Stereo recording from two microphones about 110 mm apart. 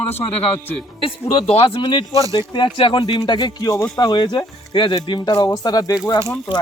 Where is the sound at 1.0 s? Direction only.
60° left (ahead or behind); by 5.9 s 35° left (ahead or behind).